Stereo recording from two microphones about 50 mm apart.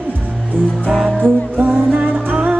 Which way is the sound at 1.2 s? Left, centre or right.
Right.